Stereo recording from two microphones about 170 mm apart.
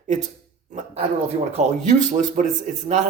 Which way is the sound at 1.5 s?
45° right (ahead or behind).